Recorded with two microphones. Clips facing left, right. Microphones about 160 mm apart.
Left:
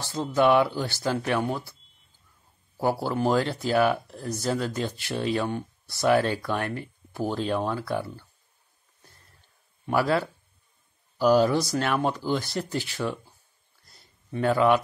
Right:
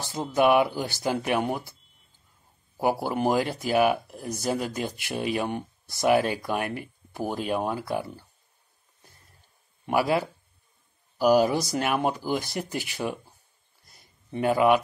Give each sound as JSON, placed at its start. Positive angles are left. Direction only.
{"t": 0.0, "sound": "speech", "side_deg": -15}
{"t": 2.8, "sound": "speech", "side_deg": -15}
{"t": 9.8, "sound": "speech", "side_deg": -15}
{"t": 13.9, "sound": "a sound", "side_deg": -15}